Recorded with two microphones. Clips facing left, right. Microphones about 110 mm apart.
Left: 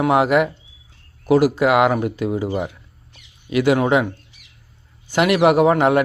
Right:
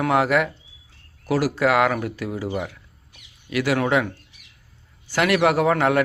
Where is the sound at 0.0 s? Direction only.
20° left (ahead or behind).